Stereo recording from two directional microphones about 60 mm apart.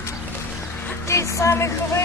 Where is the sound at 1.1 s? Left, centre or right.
Left.